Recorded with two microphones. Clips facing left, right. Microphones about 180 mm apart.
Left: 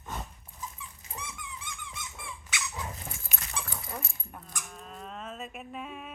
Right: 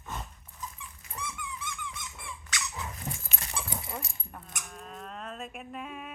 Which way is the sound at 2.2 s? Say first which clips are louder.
Even; 5° left (ahead or behind).